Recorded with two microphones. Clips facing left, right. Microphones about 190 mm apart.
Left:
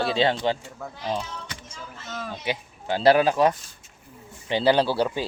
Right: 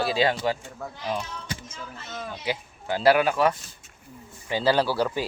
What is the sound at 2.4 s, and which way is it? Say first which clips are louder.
Speech: left 1 dB; 25° left (ahead or behind).